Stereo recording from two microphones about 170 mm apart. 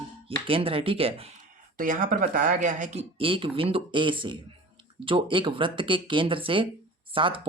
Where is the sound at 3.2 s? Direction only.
30° right (ahead or behind).